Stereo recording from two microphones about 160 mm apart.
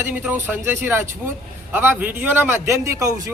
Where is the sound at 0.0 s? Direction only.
10° right (ahead or behind).